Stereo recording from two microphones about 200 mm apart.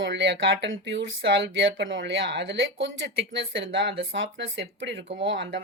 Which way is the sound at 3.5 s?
65° right (ahead or behind).